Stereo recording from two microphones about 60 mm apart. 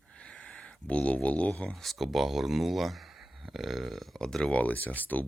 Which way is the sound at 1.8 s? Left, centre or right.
Centre.